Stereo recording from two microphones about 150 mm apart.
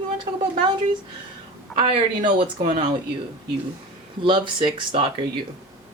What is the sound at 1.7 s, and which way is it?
Speech, 40° right (ahead or behind).